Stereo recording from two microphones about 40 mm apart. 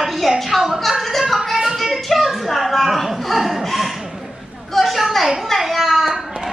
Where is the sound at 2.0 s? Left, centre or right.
Centre.